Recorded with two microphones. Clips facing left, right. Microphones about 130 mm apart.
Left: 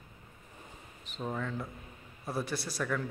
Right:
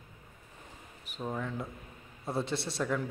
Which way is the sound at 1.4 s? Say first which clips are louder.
Even; 15° right (ahead or behind).